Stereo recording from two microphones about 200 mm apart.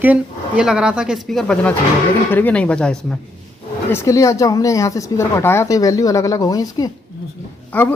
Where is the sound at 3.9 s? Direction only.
15° left (ahead or behind).